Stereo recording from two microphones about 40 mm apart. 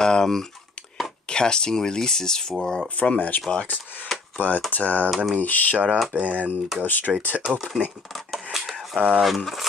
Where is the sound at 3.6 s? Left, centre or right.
Left.